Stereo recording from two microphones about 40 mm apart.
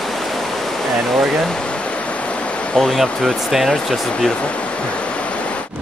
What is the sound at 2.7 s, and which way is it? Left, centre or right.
Speech, centre.